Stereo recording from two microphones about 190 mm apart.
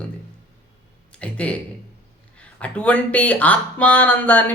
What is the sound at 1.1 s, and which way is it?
Speech, 5° left (ahead or behind).